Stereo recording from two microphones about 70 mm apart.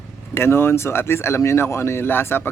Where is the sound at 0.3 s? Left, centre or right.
Left.